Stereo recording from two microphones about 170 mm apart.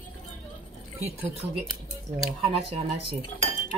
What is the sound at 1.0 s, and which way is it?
Cutlery, 35° right (ahead or behind).